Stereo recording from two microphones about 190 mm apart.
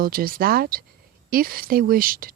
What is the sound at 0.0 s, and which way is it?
Speech, 50° right (ahead or behind).